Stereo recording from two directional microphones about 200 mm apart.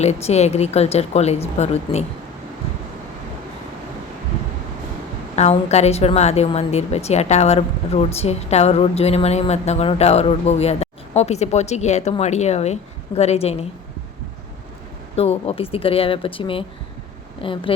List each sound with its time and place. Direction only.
0.0 s a woman's voice: 35° left (ahead or behind)
5.4 s a woman's voice: 35° left (ahead or behind)
15.1 s speech: 30° left (ahead or behind)